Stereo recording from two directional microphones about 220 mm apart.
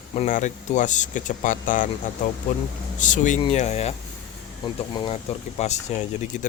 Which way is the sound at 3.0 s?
35° left (ahead or behind).